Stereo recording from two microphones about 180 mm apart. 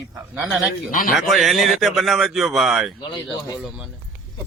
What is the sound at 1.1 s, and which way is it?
A man's voice, centre (ahead or behind).